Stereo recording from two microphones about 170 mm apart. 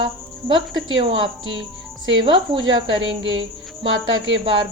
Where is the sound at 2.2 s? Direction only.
25° right (ahead or behind).